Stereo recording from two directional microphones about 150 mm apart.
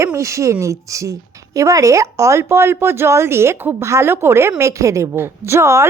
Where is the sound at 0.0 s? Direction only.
20° right (ahead or behind).